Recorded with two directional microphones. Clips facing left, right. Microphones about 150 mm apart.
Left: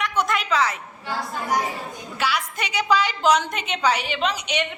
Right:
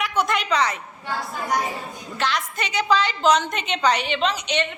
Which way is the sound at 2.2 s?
10° left (ahead or behind).